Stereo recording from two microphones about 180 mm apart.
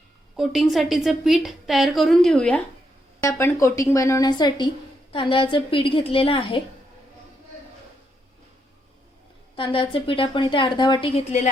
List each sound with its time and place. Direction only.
0.3 s a woman's voice: centre (ahead or behind)
3.2 s a woman's voice: 15° left (ahead or behind)
9.6 s a woman's voice: 30° left (ahead or behind)